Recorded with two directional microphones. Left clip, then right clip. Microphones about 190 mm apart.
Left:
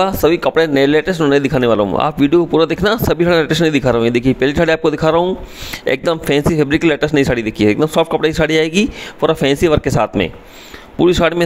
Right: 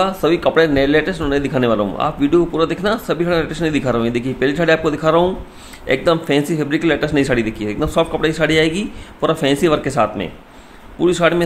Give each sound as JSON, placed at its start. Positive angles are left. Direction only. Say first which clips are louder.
{"t": 0.0, "sound": "speech", "louder": "left 2 dB", "side_deg": 45}